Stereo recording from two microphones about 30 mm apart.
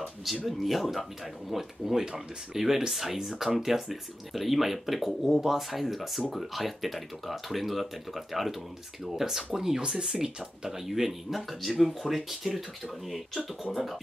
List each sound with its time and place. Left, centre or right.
0.0 s speech: centre
9.2 s speech: centre
9.8 s speech: right
10.7 s speech: centre
13.7 s speech: centre